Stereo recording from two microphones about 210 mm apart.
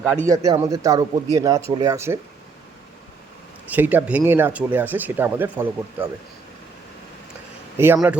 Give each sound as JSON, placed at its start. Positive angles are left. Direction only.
{"t": 0.3, "sound": "speech", "side_deg": -15}
{"t": 3.7, "sound": "speech", "side_deg": -10}
{"t": 7.8, "sound": "speech", "side_deg": -10}